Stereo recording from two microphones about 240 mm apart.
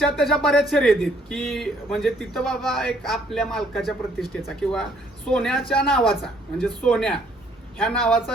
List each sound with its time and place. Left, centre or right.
0.0 s speech: centre